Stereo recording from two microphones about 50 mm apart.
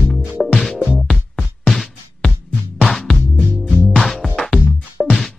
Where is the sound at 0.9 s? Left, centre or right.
Left.